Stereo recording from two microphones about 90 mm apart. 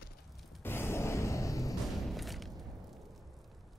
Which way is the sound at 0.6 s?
25° left (ahead or behind).